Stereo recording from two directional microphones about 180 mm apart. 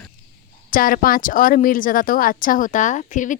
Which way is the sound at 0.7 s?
50° left (ahead or behind).